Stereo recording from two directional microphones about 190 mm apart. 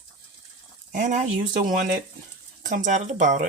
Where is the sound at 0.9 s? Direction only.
40° right (ahead or behind).